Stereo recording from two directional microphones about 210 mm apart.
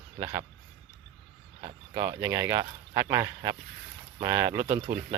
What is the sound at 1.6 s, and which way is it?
Speech, 20° right (ahead or behind).